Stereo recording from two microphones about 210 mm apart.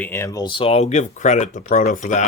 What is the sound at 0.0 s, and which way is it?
Speech, 10° left (ahead or behind).